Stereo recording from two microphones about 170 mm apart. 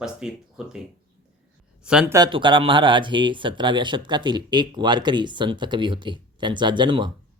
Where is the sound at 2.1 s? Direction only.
25° right (ahead or behind).